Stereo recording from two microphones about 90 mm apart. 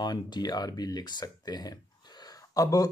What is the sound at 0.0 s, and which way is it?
Speech, 50° left (ahead or behind).